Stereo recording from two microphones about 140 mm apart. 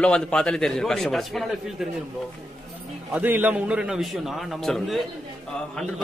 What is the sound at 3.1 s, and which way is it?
Speech, 10° right (ahead or behind).